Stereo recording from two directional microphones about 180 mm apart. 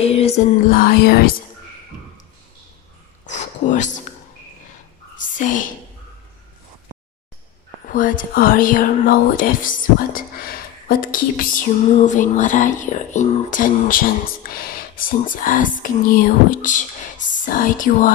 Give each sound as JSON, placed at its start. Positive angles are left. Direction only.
{"t": 0.0, "sound": "music", "side_deg": 35}
{"t": 0.7, "sound": "speech", "side_deg": 55}
{"t": 3.3, "sound": "a sound", "side_deg": 40}
{"t": 5.1, "sound": "a sound", "side_deg": 45}
{"t": 7.9, "sound": "speech", "side_deg": 50}
{"t": 11.8, "sound": "speech", "side_deg": 40}